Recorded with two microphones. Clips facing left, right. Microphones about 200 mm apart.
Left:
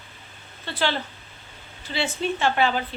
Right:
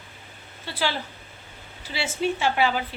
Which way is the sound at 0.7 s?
10° right (ahead or behind).